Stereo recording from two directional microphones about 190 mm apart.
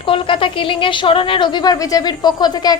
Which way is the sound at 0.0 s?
25° left (ahead or behind).